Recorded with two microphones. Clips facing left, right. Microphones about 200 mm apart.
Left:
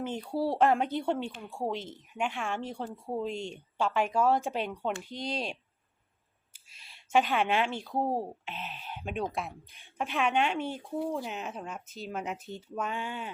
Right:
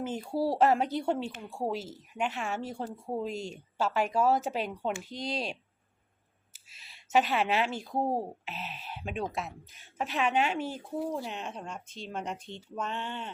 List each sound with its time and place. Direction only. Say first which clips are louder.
0.0 s speech: right 1 dB; 5° right (ahead or behind)
5.0 s speech: even; 40° right (ahead or behind)
7.1 s speech: even; 5° right (ahead or behind)
7.7 s speech: even; 45° right (ahead or behind)
7.9 s speech: even; 10° right (ahead or behind); by 13.3 s 5° left (ahead or behind)